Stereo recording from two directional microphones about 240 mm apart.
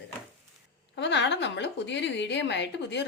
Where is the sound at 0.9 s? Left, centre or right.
Left.